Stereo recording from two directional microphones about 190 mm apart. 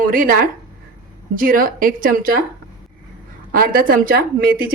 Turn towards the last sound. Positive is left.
turn(degrees=-50)  # may be behind; listen again after turning